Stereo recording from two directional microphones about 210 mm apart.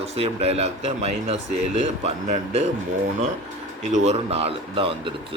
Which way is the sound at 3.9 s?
35° right (ahead or behind).